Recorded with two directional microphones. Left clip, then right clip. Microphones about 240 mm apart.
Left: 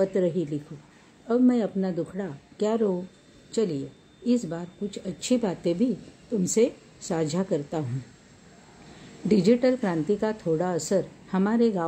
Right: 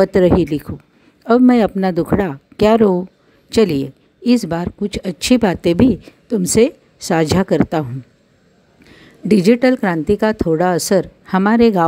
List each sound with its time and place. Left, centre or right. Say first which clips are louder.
0.0 s a woman's voice: right 12 dB; right
9.3 s a woman's voice: right 9 dB; right